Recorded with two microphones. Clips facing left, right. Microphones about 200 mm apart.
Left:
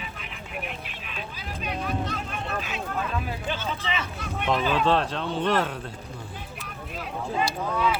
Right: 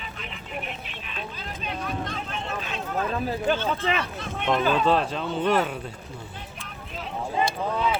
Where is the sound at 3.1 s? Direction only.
45° right (ahead or behind).